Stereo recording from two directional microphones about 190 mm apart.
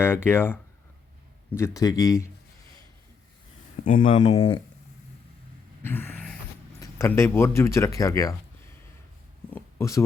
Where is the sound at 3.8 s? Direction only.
25° left (ahead or behind).